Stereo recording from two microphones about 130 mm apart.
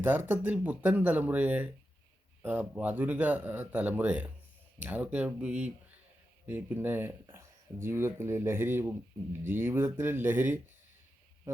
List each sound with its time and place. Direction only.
0.0 s speech: 15° right (ahead or behind)